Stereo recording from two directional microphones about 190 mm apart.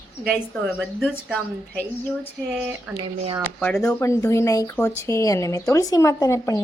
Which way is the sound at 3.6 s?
5° left (ahead or behind).